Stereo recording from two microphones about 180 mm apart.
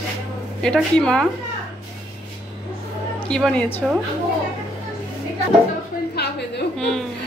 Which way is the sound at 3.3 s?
5° left (ahead or behind).